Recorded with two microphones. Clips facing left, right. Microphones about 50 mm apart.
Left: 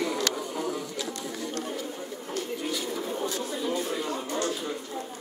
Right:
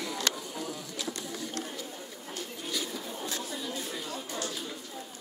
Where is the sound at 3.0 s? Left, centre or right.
Left.